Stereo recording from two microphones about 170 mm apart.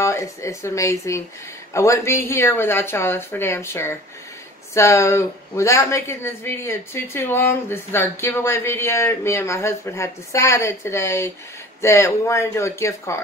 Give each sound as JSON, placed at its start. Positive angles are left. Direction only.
{"t": 0.0, "sound": "speech", "side_deg": 15}